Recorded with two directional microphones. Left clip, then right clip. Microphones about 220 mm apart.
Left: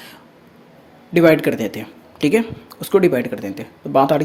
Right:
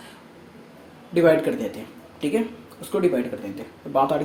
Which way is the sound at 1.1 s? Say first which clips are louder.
Left 5 dB; 50° left (ahead or behind).